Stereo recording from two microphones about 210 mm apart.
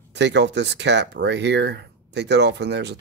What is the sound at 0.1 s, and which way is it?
Speech, 55° right (ahead or behind).